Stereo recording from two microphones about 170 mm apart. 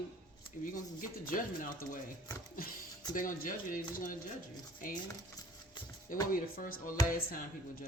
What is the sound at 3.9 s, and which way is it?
Speech, 55° left (ahead or behind).